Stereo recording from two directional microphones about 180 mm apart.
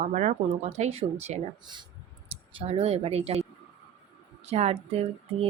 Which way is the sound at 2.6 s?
35° right (ahead or behind).